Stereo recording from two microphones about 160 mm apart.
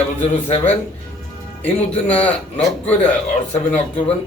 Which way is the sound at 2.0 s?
10° left (ahead or behind).